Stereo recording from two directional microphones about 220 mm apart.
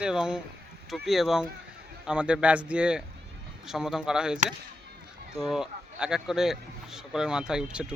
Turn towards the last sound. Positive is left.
turn(degrees=-5)  # may be behind; listen again after turning